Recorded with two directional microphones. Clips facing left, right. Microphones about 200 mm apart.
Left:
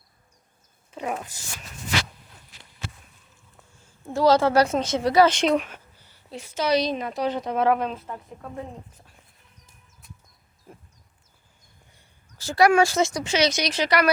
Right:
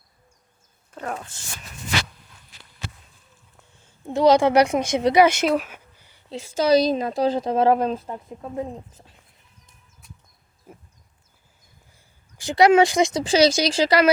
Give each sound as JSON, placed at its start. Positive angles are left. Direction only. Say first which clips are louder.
{"t": 0.9, "sound": "speech", "louder": "left 1 dB", "side_deg": 10}
{"t": 4.0, "sound": "speech", "louder": "right 3 dB", "side_deg": -20}
{"t": 6.2, "sound": "speech", "louder": "right 5 dB", "side_deg": -25}
{"t": 8.1, "sound": "speech", "louder": "right 5 dB", "side_deg": -25}
{"t": 12.4, "sound": "speech", "louder": "right 3 dB", "side_deg": -20}
{"t": 13.2, "sound": "speech", "louder": "right 6 dB", "side_deg": -35}